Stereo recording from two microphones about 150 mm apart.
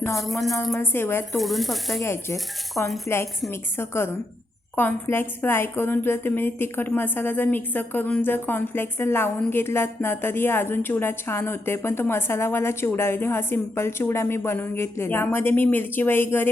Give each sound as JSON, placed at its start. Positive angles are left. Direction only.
{"t": 0.2, "sound": "speech", "side_deg": 0}
{"t": 0.8, "sound": "a woman's voice", "side_deg": 15}
{"t": 1.4, "sound": "speech", "side_deg": 0}
{"t": 2.0, "sound": "speech", "side_deg": 20}
{"t": 2.7, "sound": "speech", "side_deg": 0}
{"t": 3.5, "sound": "a woman's voice", "side_deg": 15}